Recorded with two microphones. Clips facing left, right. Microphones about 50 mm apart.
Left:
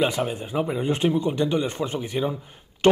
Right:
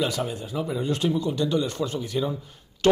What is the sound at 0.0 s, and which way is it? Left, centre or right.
Speech, left.